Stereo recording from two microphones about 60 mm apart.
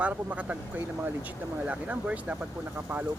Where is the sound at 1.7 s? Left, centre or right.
Right.